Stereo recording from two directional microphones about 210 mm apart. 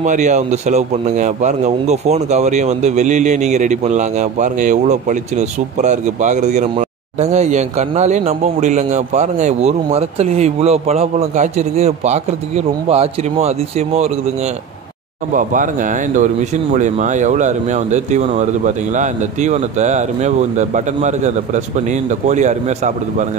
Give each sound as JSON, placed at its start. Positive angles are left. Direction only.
{"t": 0.0, "sound": "speech", "side_deg": -35}
{"t": 15.3, "sound": "speech", "side_deg": -40}